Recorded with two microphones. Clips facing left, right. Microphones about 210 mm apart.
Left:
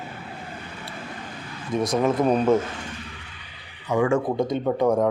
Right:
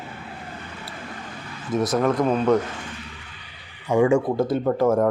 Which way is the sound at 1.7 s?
Centre (ahead or behind).